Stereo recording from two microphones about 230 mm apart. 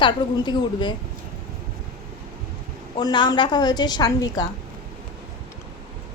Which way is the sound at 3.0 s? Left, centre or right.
Centre.